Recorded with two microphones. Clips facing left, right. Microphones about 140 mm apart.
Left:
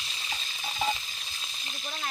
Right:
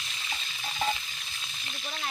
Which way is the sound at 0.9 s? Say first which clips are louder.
Even; 35° left (ahead or behind).